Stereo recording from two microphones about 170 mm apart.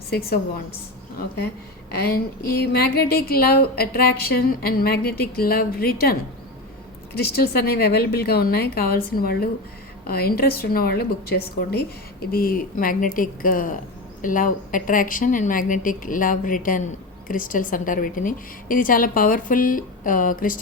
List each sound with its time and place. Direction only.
1.9 s a woman's voice: 70° left (ahead or behind); by 20.6 s 55° left (ahead or behind)